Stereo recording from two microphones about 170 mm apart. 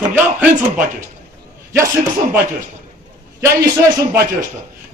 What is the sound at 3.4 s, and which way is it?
Speech, 15° right (ahead or behind).